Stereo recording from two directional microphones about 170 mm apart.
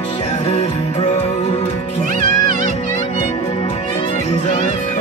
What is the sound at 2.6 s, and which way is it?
Music, 45° left (ahead or behind).